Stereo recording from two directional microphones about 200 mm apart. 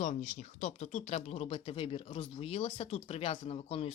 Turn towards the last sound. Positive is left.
turn(degrees=30)  # may be behind; listen again after turning